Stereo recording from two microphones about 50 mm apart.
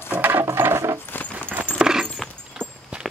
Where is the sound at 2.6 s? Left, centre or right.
Centre.